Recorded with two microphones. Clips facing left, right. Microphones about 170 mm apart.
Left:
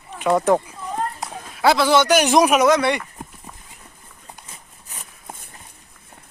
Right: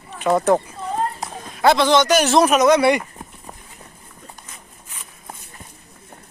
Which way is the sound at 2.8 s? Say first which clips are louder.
Right 4 dB; 10° right (ahead or behind).